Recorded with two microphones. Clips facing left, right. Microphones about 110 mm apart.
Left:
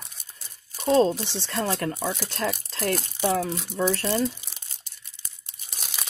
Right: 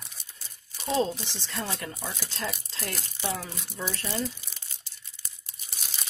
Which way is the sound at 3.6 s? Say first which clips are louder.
Left 10 dB; 65° left (ahead or behind).